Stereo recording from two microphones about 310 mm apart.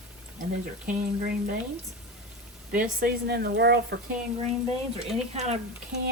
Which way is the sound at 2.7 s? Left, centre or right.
Right.